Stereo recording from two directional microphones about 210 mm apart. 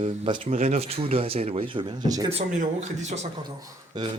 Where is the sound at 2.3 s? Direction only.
35° right (ahead or behind).